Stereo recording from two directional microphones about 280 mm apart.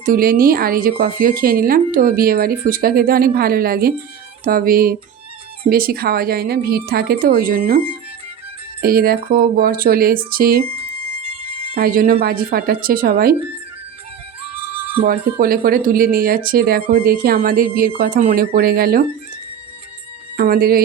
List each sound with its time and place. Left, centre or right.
0.0 s speech: right
8.8 s speech: right
11.7 s speech: right
15.0 s speech: right
20.3 s speech: right